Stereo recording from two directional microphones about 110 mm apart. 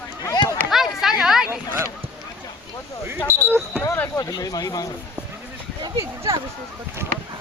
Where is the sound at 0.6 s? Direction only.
5° right (ahead or behind).